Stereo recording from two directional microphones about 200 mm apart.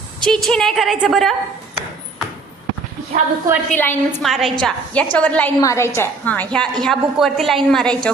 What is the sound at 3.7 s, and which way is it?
A woman's voice, 10° left (ahead or behind).